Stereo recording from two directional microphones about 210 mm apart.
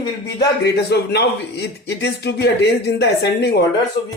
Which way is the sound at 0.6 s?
55° left (ahead or behind).